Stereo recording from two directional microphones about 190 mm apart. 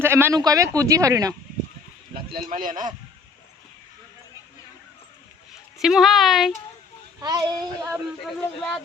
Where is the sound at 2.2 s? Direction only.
50° right (ahead or behind).